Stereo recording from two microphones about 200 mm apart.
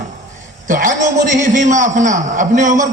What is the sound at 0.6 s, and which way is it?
A man's voice, 40° right (ahead or behind).